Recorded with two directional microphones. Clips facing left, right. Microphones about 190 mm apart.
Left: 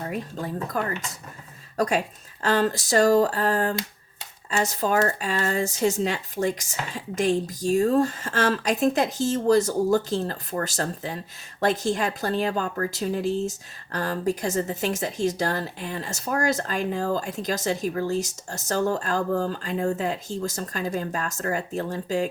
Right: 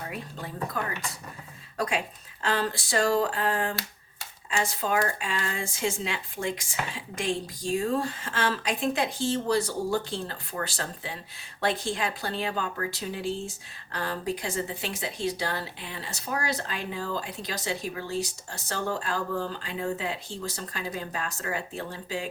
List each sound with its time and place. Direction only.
0.0 s a woman's voice: 45° left (ahead or behind)